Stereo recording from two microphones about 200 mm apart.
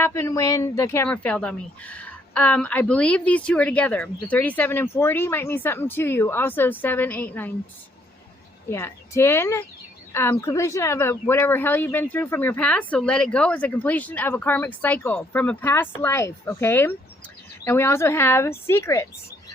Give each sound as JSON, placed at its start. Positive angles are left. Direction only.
{"t": 0.0, "sound": "speech", "side_deg": 15}
{"t": 8.7, "sound": "speech", "side_deg": 15}